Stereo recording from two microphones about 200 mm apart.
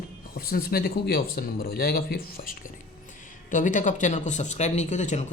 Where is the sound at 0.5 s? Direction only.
50° left (ahead or behind).